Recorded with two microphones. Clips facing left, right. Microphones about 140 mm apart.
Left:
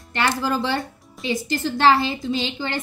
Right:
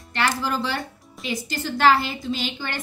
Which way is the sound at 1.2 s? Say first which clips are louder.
Left 5 dB; 20° left (ahead or behind).